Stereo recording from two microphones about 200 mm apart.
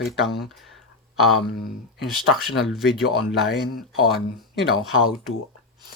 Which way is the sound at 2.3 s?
Centre (ahead or behind).